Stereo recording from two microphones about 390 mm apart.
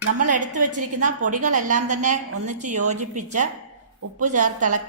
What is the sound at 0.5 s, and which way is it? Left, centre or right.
Speech, right.